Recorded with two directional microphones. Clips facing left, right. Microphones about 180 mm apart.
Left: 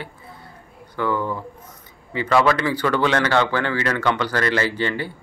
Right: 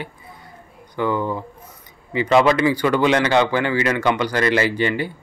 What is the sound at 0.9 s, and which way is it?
Speech, 20° right (ahead or behind).